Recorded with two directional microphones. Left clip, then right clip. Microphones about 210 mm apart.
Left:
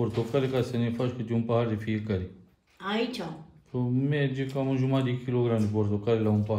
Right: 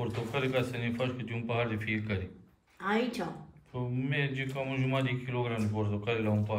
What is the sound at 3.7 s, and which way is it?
A man's voice, 60° left (ahead or behind).